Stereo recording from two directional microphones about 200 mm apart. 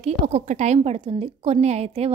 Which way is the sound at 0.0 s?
35° right (ahead or behind).